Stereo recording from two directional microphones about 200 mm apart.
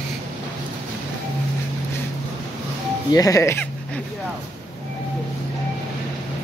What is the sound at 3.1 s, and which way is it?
Speech, 15° left (ahead or behind).